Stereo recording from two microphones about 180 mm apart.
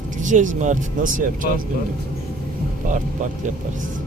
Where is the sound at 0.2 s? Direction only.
45° right (ahead or behind).